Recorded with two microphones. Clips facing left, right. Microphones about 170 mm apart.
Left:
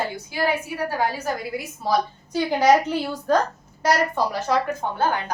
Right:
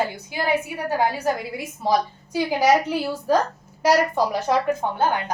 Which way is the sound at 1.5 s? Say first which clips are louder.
Right 2 dB; 20° right (ahead or behind).